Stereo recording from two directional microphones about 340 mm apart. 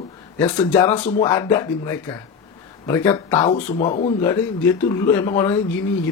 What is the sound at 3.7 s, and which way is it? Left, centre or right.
Speech, centre.